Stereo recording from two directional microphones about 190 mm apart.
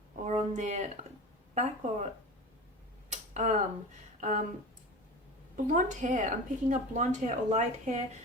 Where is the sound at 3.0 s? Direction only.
40° right (ahead or behind).